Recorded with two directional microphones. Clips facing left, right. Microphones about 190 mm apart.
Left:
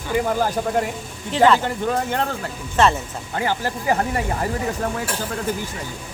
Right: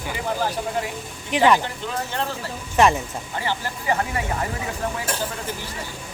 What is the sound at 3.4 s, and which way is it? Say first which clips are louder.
Speech: left 5 dB; 45° left (ahead or behind).